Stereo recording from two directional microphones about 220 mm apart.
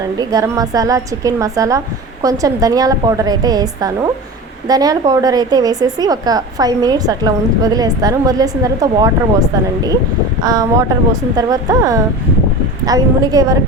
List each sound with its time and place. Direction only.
0.0 s a woman's voice: 15° right (ahead or behind)